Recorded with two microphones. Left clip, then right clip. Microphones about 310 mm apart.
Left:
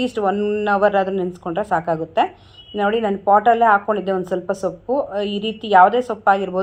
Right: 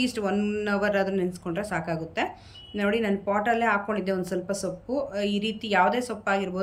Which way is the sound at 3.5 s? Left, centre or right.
Centre.